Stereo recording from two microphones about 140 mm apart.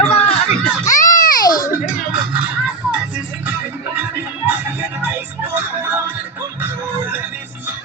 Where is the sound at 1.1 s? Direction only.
75° left (ahead or behind).